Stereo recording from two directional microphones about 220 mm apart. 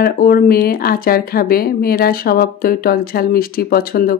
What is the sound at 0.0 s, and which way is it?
Speech, 40° left (ahead or behind).